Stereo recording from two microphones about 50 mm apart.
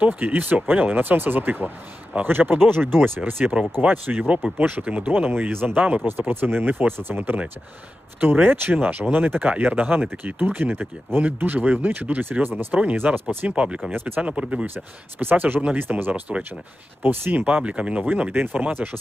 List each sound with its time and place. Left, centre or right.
0.0 s speech: right
3.4 s speech: right
4.0 s speech: right
5.5 s speech: right
5.7 s speech: right
6.1 s speech: right
13.0 s speech: right
15.2 s speech: right
17.4 s speech: right